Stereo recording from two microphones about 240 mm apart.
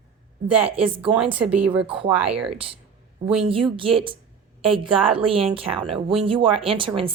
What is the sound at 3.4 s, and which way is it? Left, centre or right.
Speech, right.